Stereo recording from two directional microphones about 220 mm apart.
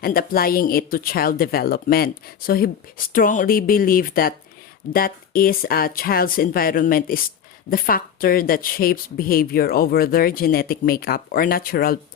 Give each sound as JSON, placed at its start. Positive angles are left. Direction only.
{"t": 0.0, "sound": "a woman's voice", "side_deg": 40}